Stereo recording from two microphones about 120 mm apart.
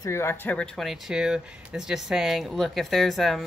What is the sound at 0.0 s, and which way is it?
Speech, 20° left (ahead or behind).